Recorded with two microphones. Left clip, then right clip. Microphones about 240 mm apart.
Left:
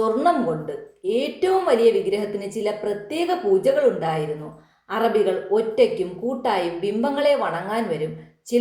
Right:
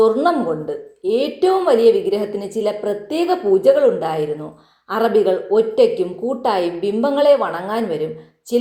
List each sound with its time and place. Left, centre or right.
0.0 s a woman's voice: right